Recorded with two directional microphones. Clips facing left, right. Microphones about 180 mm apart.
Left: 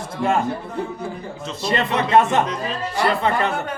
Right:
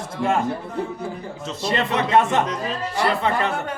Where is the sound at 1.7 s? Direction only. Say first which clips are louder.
Left 2 dB; 40° left (ahead or behind).